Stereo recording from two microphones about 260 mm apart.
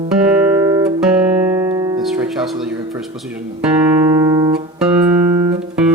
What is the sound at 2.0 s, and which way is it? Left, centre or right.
Music, centre.